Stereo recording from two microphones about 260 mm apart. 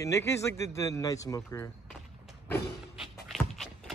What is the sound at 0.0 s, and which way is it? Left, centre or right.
Speech, centre.